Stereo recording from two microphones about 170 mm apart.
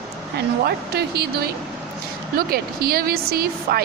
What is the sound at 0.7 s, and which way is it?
A woman's voice, 70° right (ahead or behind).